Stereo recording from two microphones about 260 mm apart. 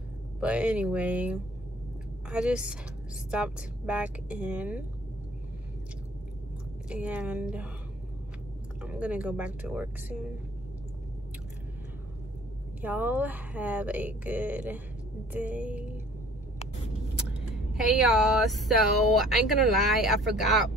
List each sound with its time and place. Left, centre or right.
0.4 s speech: centre
6.9 s speech: centre
8.8 s speech: centre
12.8 s speech: centre
15.3 s a sound: centre
17.7 s speech: centre